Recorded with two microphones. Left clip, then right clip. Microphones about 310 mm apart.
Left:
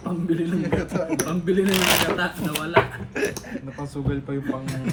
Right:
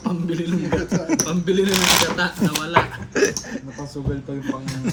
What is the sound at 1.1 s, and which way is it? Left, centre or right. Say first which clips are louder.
Speech: right 4 dB; right.